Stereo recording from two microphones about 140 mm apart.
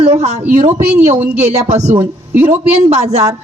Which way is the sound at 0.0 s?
50° right (ahead or behind).